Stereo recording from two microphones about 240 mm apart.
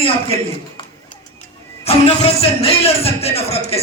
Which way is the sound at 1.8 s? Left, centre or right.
Left.